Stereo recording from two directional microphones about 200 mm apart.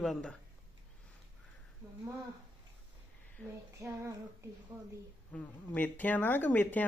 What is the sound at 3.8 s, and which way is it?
Female singing, 15° right (ahead or behind).